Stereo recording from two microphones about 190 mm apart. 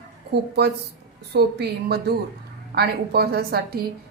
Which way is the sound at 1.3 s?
60° right (ahead or behind).